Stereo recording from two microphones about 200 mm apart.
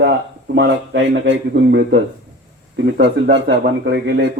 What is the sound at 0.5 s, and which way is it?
Speech, 65° right (ahead or behind).